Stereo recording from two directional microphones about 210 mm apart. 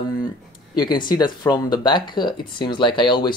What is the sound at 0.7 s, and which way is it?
Speech, 20° left (ahead or behind).